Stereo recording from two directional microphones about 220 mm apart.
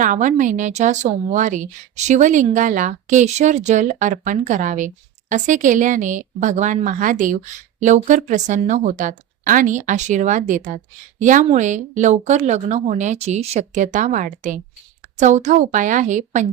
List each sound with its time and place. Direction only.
0.0 s a woman's voice: 35° right (ahead or behind)